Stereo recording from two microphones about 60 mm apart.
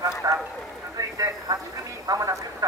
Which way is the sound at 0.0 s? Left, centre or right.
Right.